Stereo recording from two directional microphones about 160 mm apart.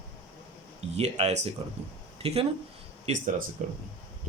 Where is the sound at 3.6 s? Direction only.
50° right (ahead or behind).